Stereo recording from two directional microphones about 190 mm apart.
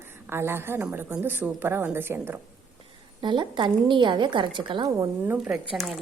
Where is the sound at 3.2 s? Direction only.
25° right (ahead or behind).